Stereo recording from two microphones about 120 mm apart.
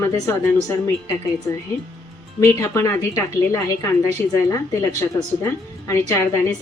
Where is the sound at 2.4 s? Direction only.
20° left (ahead or behind).